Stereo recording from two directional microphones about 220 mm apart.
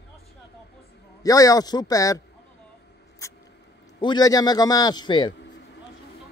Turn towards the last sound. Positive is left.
turn(degrees=20)  # may be behind; listen again after turning